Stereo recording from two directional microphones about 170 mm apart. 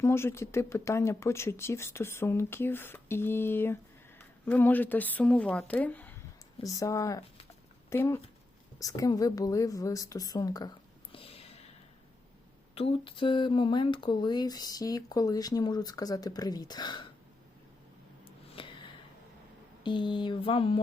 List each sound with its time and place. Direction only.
0.0 s speech: 15° left (ahead or behind)
6.6 s speech: 20° left (ahead or behind)
11.1 s a sound: 35° left (ahead or behind)
12.7 s speech: 35° left (ahead or behind)
18.3 s a sound: 30° left (ahead or behind)
19.8 s speech: 30° left (ahead or behind)